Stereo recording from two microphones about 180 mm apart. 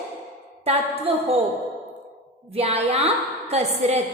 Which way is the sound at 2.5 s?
35° right (ahead or behind).